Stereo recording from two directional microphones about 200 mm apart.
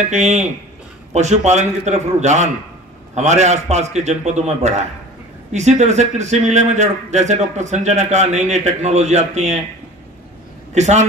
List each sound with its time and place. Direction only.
0.1 s a man's voice: 35° right (ahead or behind)
10.7 s speech: 35° right (ahead or behind)